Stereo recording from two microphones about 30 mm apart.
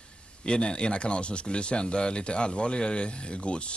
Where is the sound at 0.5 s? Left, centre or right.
Left.